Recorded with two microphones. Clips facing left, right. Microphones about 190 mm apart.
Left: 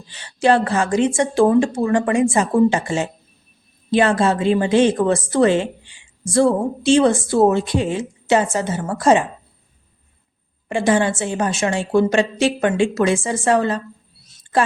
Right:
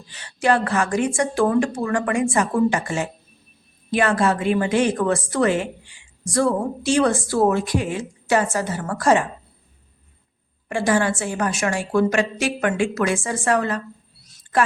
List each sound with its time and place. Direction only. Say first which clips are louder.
0.1 s a woman's voice: left 4 dB; 25° left (ahead or behind)
10.7 s a woman's voice: left 3 dB; 20° left (ahead or behind)